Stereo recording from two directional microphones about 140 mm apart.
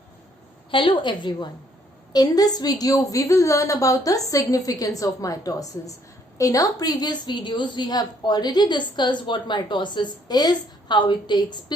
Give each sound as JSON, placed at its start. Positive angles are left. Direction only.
{"t": 0.7, "sound": "a woman's voice", "side_deg": 35}